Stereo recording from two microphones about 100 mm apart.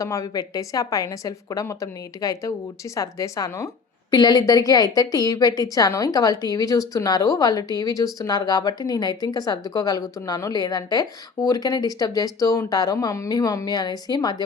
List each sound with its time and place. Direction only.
0.0 s a woman's voice: 35° left (ahead or behind)